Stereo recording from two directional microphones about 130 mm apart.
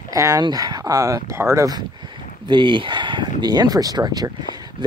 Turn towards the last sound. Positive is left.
turn(degrees=-30)  # may be behind; listen again after turning